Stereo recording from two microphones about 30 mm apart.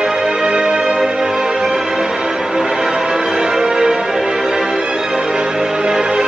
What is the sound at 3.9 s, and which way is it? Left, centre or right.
Music, right.